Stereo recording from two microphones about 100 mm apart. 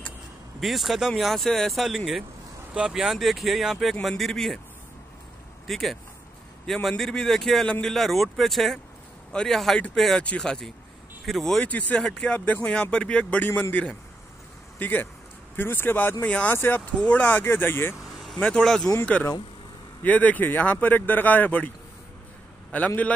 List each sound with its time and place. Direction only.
0.6 s speech: centre (ahead or behind)
5.7 s speech: centre (ahead or behind)
12.4 s speech: 20° left (ahead or behind)
12.6 s speech: 10° left (ahead or behind)
18.2 s speech: 5° left (ahead or behind)
20.0 s speech: 15° left (ahead or behind)